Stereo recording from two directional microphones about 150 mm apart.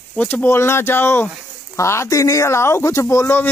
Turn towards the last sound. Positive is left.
turn(degrees=15)  # may be behind; listen again after turning